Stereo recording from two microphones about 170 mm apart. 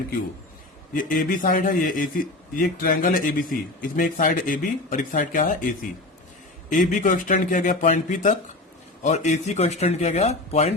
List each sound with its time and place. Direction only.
0.9 s a man's voice: 50° left (ahead or behind)
6.7 s a man's voice: 50° left (ahead or behind)